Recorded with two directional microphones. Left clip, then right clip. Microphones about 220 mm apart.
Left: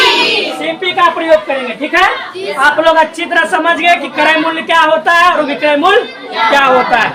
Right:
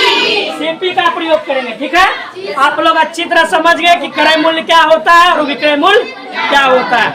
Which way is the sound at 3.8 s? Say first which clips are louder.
Right 1 dB; 15° right (ahead or behind).